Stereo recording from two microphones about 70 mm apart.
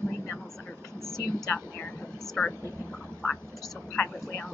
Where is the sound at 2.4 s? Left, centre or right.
Left.